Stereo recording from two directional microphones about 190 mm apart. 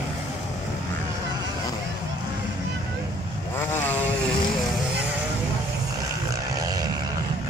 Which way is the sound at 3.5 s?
10° left (ahead or behind).